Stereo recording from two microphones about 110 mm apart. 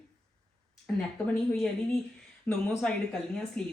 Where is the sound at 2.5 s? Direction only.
15° left (ahead or behind).